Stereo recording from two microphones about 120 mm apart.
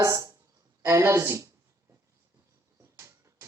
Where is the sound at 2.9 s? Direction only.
25° right (ahead or behind).